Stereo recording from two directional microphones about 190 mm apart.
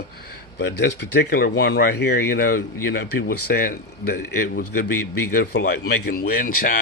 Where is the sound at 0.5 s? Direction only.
65° left (ahead or behind).